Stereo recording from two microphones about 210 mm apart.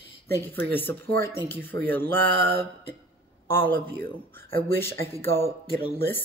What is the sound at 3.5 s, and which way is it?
Speech, 10° left (ahead or behind).